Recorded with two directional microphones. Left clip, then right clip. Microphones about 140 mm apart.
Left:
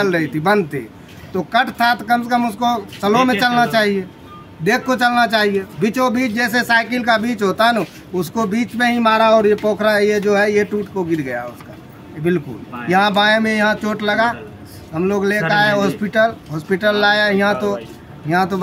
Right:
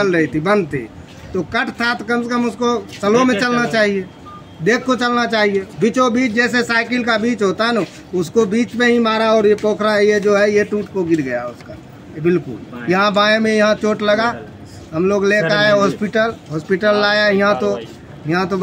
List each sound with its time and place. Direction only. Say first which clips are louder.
0.0 s a man's voice: right 1 dB; 25° left (ahead or behind)